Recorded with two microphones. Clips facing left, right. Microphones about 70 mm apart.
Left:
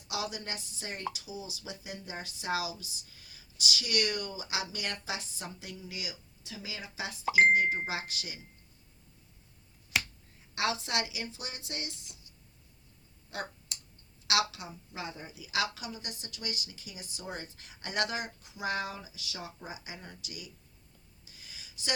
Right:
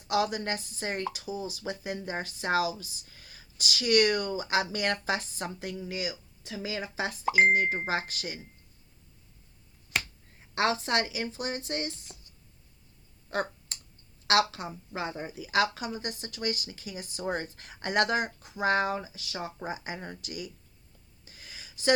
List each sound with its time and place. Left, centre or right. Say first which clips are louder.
0.1 s speech: right 9 dB; right
9.9 s finger snapping: right 1 dB; centre
10.5 s speech: right 5 dB; right
13.3 s a sound: right 8 dB; right
14.3 s speech: right 6 dB; right
21.2 s a sound: right 4 dB; right